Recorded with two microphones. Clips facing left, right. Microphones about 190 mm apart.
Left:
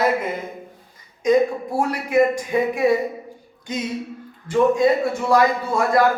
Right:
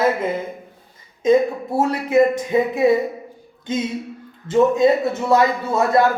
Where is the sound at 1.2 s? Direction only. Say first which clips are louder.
Right 1 dB; 25° right (ahead or behind).